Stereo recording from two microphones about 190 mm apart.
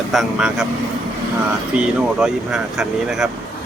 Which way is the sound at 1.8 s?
5° right (ahead or behind).